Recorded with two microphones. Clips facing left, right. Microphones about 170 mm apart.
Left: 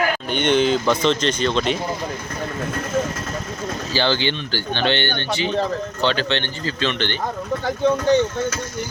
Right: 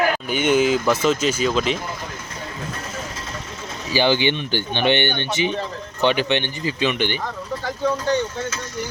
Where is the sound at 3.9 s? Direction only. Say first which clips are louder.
Right 3 dB; 15° right (ahead or behind).